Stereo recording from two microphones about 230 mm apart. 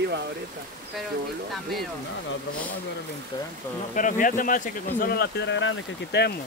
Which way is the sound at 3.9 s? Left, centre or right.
Left.